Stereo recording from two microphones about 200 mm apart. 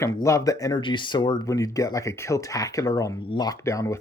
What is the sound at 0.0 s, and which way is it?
Speech, 15° left (ahead or behind).